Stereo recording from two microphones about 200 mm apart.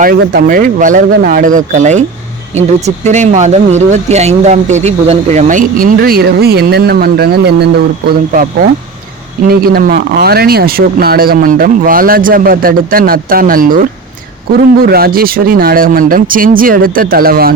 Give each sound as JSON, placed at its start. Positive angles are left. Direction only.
{"t": 0.0, "sound": "speech", "side_deg": -45}
{"t": 9.5, "sound": "speech", "side_deg": -50}
{"t": 14.8, "sound": "speech", "side_deg": -50}